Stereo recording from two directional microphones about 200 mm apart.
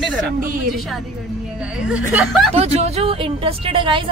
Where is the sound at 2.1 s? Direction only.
Centre (ahead or behind).